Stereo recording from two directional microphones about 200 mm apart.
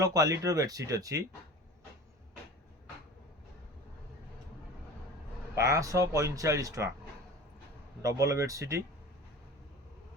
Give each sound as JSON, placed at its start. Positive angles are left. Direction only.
{"t": 0.0, "sound": "speech", "side_deg": -15}
{"t": 5.5, "sound": "speech", "side_deg": -15}
{"t": 8.0, "sound": "speech", "side_deg": -15}